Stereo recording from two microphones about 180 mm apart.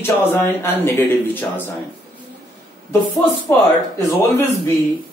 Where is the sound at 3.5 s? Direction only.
15° left (ahead or behind).